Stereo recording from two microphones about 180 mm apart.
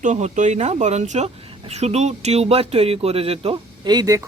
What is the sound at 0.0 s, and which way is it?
A woman's voice, 40° right (ahead or behind).